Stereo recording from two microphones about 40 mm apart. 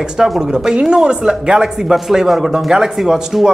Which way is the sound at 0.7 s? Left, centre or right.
Right.